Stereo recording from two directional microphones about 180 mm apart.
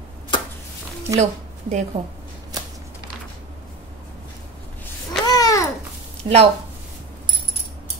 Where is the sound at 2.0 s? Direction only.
30° right (ahead or behind).